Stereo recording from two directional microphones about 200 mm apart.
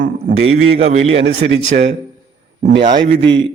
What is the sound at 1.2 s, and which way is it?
Speech, 55° right (ahead or behind).